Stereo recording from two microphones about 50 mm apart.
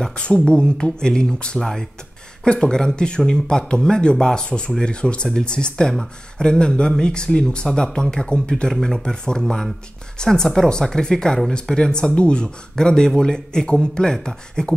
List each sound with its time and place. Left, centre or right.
0.3 s speech: centre
1.6 s speech: centre
2.4 s speech: centre